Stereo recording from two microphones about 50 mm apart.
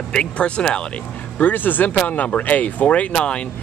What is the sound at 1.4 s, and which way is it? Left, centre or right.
Speech, left.